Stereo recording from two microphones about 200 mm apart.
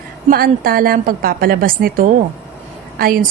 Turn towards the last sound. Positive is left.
turn(degrees=-45)  # may be behind; listen again after turning